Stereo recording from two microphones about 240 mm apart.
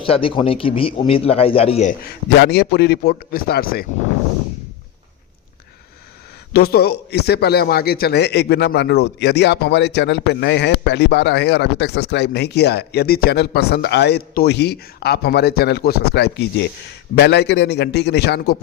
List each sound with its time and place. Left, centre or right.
0.0 s a man's voice: left
6.5 s a man's voice: left